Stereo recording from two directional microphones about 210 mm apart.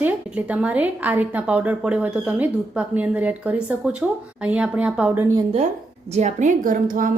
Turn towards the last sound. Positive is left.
turn(degrees=-40)  # may be behind; listen again after turning